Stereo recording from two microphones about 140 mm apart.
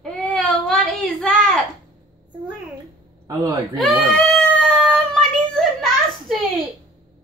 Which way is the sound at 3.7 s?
Centre (ahead or behind).